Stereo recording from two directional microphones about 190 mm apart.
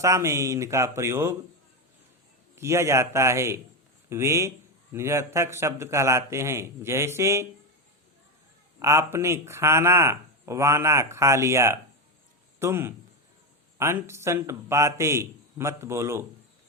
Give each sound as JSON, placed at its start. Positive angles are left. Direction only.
{"t": 0.0, "sound": "speech", "side_deg": -15}
{"t": 2.6, "sound": "speech", "side_deg": -15}
{"t": 8.8, "sound": "speech", "side_deg": -15}